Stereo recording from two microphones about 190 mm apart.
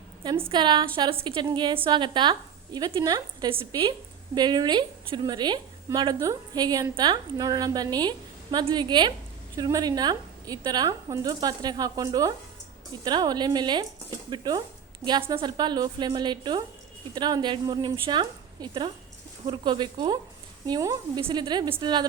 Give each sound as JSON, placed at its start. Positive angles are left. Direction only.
{"t": 0.2, "sound": "a woman's voice", "side_deg": -25}